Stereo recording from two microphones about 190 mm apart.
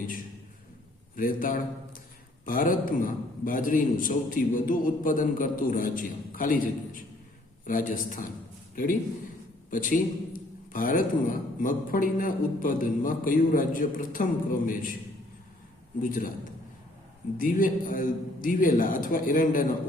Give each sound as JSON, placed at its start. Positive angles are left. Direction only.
{"t": 1.1, "sound": "a man's voice", "side_deg": 45}
{"t": 16.0, "sound": "a man's voice", "side_deg": 45}
{"t": 17.3, "sound": "a man's voice", "side_deg": 45}